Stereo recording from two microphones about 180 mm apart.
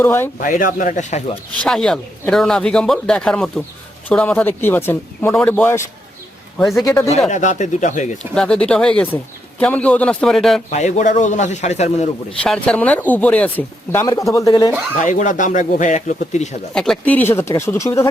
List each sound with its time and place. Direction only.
0.0 s speech: 10° left (ahead or behind)
0.3 s speech: 50° left (ahead or behind)
1.5 s speech: 5° left (ahead or behind)
7.3 s speech: 40° left (ahead or behind)
8.2 s speech: 5° left (ahead or behind)
10.7 s a man's voice: 40° left (ahead or behind)
12.4 s speech: 5° left (ahead or behind)
15.0 s speech: 45° left (ahead or behind)
16.7 s speech: 5° left (ahead or behind)